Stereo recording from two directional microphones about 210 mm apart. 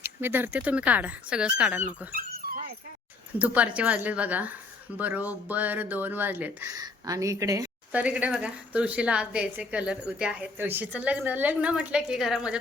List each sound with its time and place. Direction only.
0.0 s speech: 10° right (ahead or behind)
2.1 s dog: 45° right (ahead or behind)
3.3 s speech: 5° right (ahead or behind)